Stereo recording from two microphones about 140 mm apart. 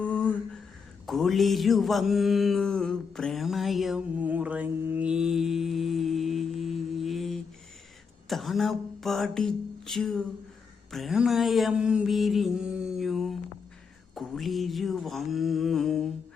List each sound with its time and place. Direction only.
0.0 s humming: 10° left (ahead or behind)
1.0 s mantra: centre (ahead or behind)
4.2 s mantra: 10° right (ahead or behind)
8.3 s a sound: centre (ahead or behind)
10.9 s mantra: centre (ahead or behind)